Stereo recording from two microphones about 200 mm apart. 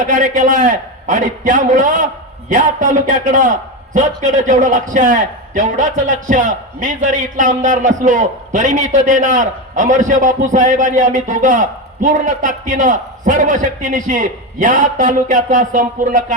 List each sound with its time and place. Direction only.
0.0 s a man's voice: 40° right (ahead or behind)